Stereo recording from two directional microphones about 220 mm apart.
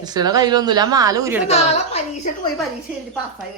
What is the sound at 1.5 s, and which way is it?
Speech, 30° left (ahead or behind).